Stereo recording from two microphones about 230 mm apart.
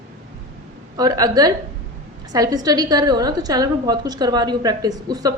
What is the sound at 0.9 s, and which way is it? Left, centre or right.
A woman's voice, centre.